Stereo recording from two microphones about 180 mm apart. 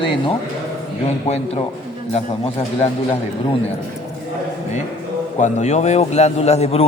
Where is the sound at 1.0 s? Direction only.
35° left (ahead or behind).